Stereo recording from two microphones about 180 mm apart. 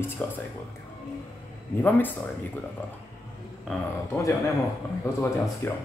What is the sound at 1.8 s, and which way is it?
Speech, 10° left (ahead or behind).